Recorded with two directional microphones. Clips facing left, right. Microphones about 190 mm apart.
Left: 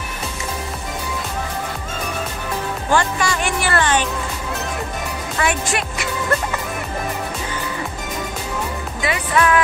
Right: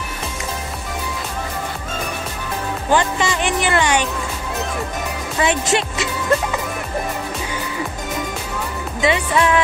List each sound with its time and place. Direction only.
2.9 s speech: 20° right (ahead or behind)
5.4 s speech: 20° right (ahead or behind)
9.0 s speech: 25° right (ahead or behind)